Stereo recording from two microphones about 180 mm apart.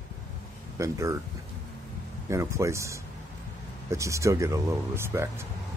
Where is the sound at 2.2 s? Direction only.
15° right (ahead or behind).